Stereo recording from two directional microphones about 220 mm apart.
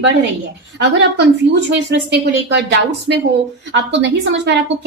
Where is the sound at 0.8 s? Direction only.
50° right (ahead or behind).